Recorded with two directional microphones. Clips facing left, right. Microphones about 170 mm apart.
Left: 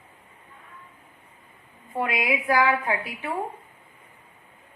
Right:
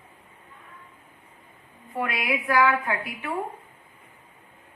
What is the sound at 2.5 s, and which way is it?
Speech, 35° left (ahead or behind).